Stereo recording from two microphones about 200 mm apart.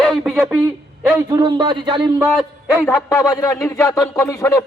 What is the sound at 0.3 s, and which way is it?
Speech, 5° right (ahead or behind).